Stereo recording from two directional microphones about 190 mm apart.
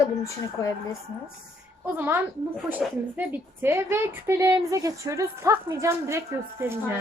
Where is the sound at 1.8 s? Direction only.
10° right (ahead or behind).